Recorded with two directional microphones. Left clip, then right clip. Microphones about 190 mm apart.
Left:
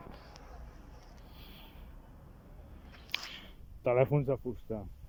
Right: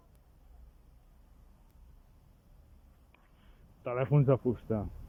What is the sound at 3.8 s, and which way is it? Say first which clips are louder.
Speech: left 1 dB; 25° left (ahead or behind).